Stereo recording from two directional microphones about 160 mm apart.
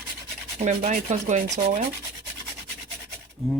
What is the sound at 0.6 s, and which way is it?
Speech, 45° right (ahead or behind).